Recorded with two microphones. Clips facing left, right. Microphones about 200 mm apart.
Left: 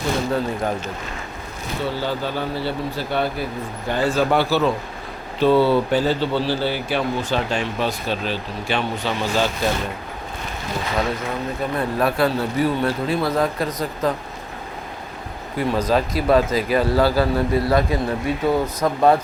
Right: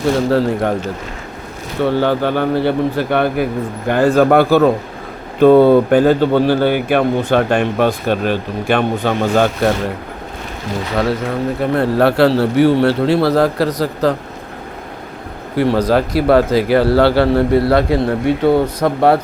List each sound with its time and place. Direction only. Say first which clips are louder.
0.3 s a man's voice: right 7 dB; 75° right (ahead or behind)
1.8 s speech: right 10 dB; 60° right (ahead or behind)
10.9 s a man's voice: right 7 dB; 65° right (ahead or behind)
15.5 s a man's voice: right 6 dB; 75° right (ahead or behind)